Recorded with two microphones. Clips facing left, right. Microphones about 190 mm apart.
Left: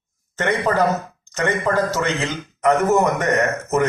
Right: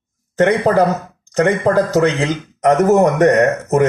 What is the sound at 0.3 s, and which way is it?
A man's voice, 40° right (ahead or behind).